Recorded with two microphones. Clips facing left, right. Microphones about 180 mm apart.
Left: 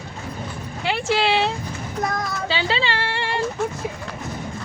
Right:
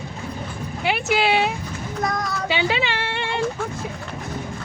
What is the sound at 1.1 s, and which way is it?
Speech, 15° right (ahead or behind).